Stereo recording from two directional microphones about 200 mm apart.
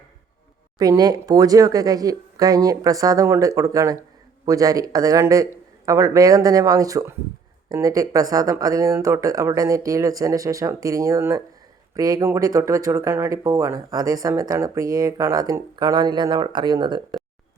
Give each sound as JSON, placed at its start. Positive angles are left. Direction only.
{"t": 0.8, "sound": "speech", "side_deg": -20}